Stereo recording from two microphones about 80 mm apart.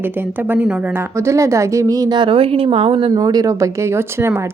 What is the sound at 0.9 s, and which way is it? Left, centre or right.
A woman's voice, right.